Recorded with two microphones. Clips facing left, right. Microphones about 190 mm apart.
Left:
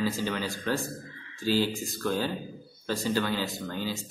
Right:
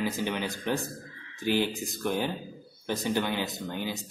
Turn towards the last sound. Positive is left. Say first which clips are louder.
# left 1 dB
turn(degrees=-20)  # may be behind; listen again after turning